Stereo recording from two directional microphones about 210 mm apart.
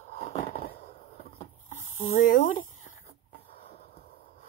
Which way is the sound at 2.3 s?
40° left (ahead or behind).